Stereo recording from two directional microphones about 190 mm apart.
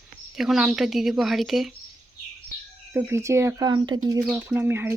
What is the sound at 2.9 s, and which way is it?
Speech, 15° right (ahead or behind).